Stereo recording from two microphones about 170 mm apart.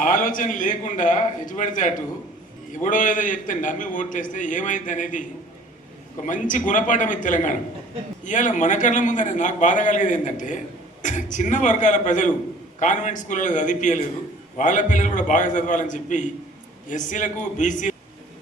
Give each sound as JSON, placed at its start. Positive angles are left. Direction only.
{"t": 0.0, "sound": "a man's voice", "side_deg": 50}
{"t": 6.2, "sound": "a man's voice", "side_deg": 50}